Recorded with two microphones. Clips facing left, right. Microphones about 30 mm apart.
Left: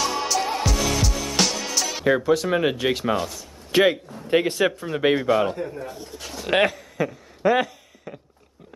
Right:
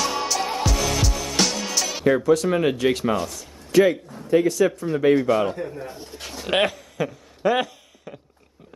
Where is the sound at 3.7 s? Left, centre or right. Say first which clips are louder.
Right 1 dB; left.